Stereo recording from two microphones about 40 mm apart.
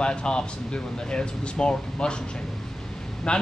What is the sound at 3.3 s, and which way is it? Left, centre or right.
Speech, left.